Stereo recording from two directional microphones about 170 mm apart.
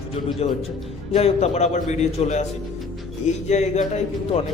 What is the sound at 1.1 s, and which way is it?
A man's voice, 40° left (ahead or behind).